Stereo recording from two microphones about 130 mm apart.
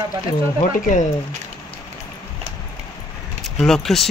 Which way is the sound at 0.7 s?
90° left.